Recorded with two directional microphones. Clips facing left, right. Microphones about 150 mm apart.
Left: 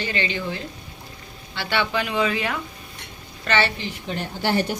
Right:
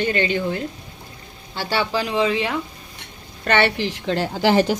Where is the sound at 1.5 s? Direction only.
40° right (ahead or behind).